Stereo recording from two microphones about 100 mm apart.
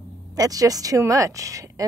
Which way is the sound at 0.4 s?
35° right (ahead or behind).